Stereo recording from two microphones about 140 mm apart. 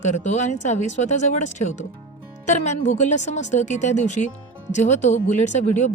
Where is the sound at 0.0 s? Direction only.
60° left (ahead or behind).